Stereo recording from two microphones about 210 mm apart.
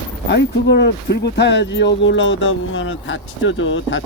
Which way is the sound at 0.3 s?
55° left (ahead or behind).